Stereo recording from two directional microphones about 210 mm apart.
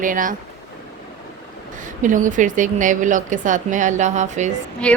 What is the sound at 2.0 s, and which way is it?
Speech, 35° right (ahead or behind).